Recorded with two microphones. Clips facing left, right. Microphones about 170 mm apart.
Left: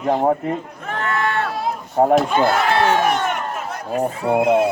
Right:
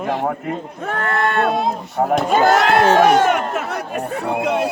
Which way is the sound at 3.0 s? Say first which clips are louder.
Right 6 dB; 80° right.